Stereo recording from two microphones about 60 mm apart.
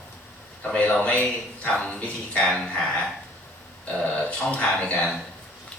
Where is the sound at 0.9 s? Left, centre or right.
Left.